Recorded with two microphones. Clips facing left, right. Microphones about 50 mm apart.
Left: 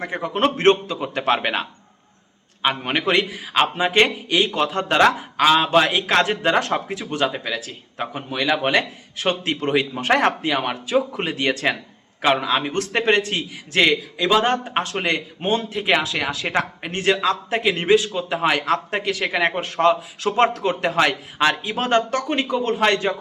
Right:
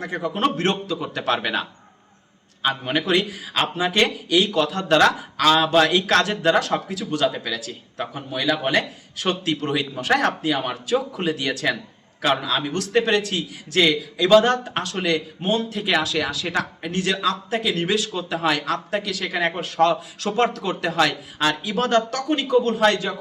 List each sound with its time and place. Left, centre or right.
0.0 s a man's voice: left
2.6 s a man's voice: left
8.1 s a man's voice: left
14.3 s a man's voice: left